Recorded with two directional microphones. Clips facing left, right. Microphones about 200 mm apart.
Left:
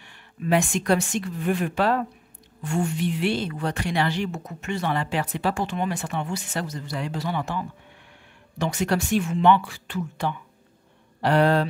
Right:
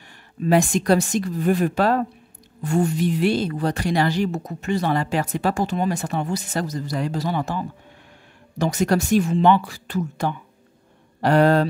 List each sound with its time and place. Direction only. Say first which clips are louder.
0.4 s speech: right 4 dB; 35° right (ahead or behind)